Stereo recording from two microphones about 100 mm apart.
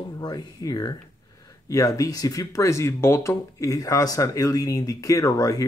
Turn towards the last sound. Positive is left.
turn(degrees=35)  # may be behind; listen again after turning